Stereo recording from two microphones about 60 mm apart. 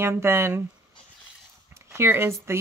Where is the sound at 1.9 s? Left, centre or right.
Right.